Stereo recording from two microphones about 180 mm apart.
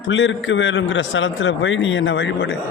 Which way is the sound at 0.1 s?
90° left.